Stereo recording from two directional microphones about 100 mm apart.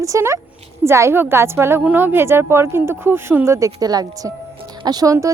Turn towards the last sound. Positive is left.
turn(degrees=-35)  # may be behind; listen again after turning